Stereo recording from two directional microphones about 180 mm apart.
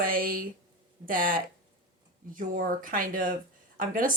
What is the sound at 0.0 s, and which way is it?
A woman's voice, 55° right (ahead or behind).